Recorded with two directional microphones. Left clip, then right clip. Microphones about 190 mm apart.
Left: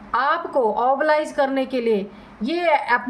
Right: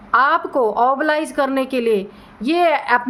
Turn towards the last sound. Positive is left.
turn(degrees=-30)  # may be behind; listen again after turning